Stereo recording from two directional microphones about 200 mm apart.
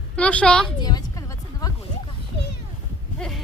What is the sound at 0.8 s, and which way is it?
Music, 20° left (ahead or behind).